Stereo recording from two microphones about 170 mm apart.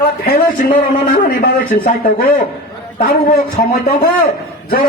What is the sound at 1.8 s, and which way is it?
A man's voice, 60° left (ahead or behind).